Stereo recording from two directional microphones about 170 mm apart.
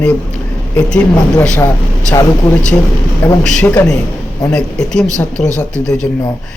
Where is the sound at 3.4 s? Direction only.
5° left (ahead or behind).